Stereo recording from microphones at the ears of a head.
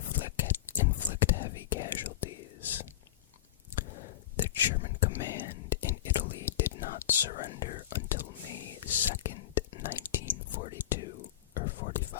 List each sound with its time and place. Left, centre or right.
0.0 s whispering: left